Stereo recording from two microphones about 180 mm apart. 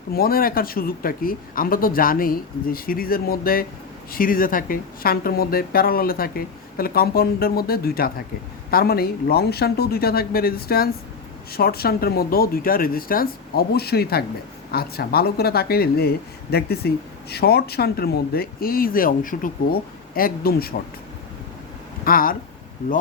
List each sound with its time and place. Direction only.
0.1 s speech: 55° left (ahead or behind)
22.0 s speech: 50° left (ahead or behind)